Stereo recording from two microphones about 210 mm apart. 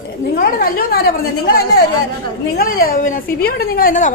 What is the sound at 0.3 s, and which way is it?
A woman's voice, 45° left (ahead or behind).